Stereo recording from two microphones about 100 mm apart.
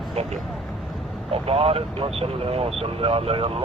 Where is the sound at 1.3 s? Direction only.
75° right (ahead or behind).